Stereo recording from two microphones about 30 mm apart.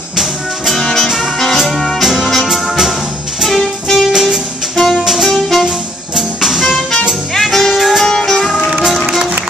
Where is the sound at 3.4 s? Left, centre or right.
Centre.